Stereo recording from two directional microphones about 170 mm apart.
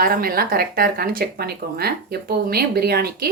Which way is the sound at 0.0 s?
60° right (ahead or behind).